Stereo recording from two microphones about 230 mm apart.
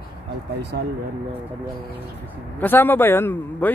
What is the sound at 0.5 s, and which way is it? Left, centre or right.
Speech, right.